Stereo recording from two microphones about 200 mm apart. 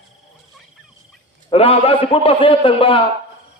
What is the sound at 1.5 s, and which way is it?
A man's voice, 30° left (ahead or behind).